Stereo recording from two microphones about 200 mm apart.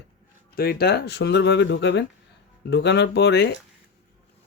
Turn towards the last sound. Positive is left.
turn(degrees=60)  # may be behind; listen again after turning